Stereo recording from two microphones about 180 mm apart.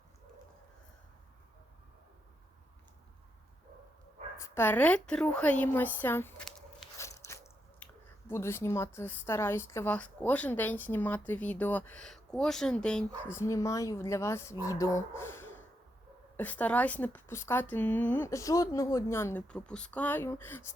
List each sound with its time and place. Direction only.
4.4 s a woman's voice: 15° left (ahead or behind)
7.0 s biting: 15° left (ahead or behind)
8.3 s a woman's voice: 15° left (ahead or behind)